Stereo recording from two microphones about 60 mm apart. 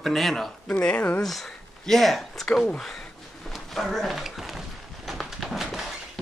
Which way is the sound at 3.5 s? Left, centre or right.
Centre.